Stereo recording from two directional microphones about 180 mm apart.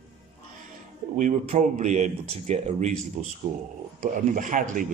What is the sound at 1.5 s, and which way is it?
Speech, 40° right (ahead or behind).